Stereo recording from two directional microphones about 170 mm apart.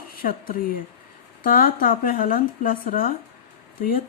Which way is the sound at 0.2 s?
60° left (ahead or behind).